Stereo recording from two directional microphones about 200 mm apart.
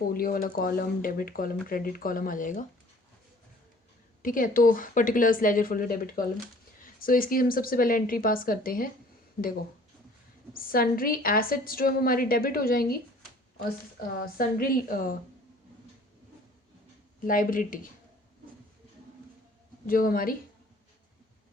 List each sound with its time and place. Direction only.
0.1 s a woman's voice: 45° left (ahead or behind)
4.2 s a woman's voice: 45° left (ahead or behind)
10.5 s a woman's voice: 45° left (ahead or behind)
14.3 s a woman's voice: 45° left (ahead or behind)
17.2 s a woman's voice: 45° left (ahead or behind)
19.9 s a woman's voice: 45° left (ahead or behind)